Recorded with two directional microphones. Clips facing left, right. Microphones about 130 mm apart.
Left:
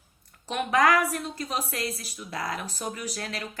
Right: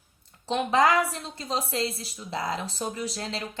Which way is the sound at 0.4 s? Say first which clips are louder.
Right 1 dB; 25° right (ahead or behind).